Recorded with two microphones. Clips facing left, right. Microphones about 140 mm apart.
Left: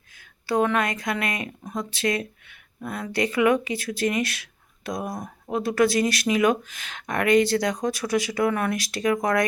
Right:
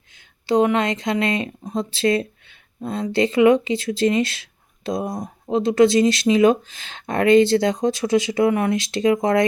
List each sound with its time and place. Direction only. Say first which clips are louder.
0.4 s speech: right 5 dB; 20° right (ahead or behind)